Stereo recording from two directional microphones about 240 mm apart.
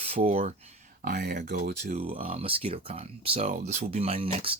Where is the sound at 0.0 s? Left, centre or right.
Right.